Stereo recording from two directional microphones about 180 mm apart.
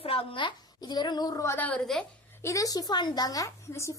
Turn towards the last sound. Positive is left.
turn(degrees=15)  # may be behind; listen again after turning